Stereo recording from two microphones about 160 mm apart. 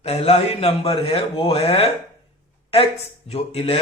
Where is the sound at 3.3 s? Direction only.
40° left (ahead or behind).